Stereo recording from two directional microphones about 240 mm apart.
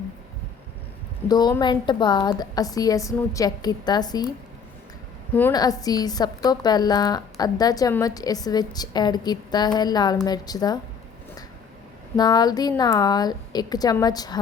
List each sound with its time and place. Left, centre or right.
1.3 s a woman's voice: centre
5.3 s a woman's voice: centre
12.1 s a woman's voice: centre